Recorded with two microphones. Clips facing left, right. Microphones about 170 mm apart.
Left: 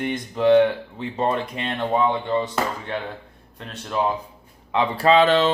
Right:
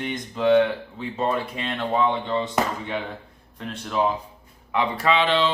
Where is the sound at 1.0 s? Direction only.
20° left (ahead or behind).